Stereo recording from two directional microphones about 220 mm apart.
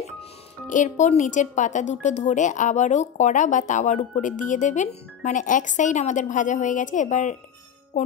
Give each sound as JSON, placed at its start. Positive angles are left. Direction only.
{"t": 0.7, "sound": "speech", "side_deg": 35}